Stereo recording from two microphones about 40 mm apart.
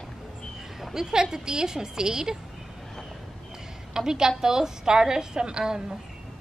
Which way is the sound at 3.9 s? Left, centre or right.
Centre.